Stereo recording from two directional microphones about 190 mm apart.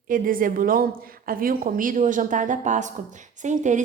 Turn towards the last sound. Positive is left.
turn(degrees=-40)  # may be behind; listen again after turning